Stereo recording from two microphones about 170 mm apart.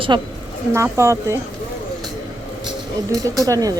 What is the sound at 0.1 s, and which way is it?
Speech, 25° right (ahead or behind).